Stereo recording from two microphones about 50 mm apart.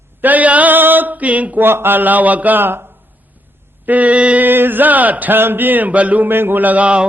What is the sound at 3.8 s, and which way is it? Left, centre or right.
Mantra, right.